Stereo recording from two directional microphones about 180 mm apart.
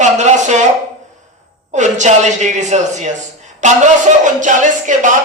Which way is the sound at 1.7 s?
40° right (ahead or behind).